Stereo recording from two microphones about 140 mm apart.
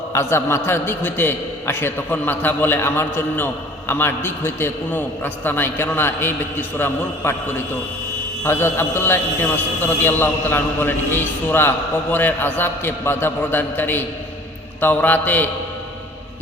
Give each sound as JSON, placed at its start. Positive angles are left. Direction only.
{"t": 0.1, "sound": "a man's voice", "side_deg": 20}